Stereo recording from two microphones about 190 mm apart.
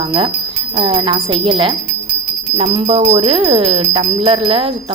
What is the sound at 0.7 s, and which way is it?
Speech, 25° right (ahead or behind).